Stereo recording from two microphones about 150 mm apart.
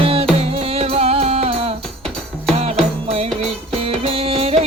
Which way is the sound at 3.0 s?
40° right (ahead or behind).